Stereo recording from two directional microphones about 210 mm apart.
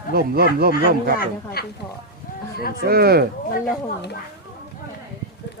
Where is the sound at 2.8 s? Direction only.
45° right (ahead or behind).